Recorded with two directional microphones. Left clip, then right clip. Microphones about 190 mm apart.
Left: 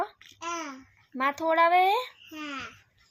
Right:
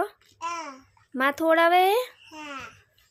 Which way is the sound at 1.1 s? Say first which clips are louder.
Right 4 dB; 30° right (ahead or behind).